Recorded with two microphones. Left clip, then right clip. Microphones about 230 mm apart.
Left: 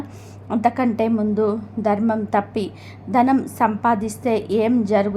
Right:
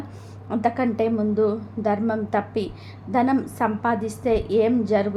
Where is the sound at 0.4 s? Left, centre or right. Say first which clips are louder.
Left 3 dB; centre.